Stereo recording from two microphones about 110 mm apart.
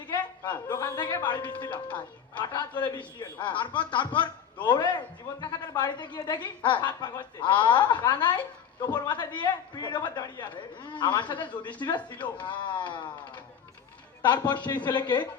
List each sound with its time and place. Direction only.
0.7 s a woman's voice: 35° left (ahead or behind)